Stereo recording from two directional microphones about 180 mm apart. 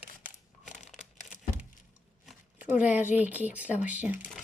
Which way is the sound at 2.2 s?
5° right (ahead or behind).